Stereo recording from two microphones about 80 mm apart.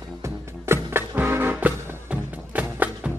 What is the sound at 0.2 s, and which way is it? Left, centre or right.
Music, right.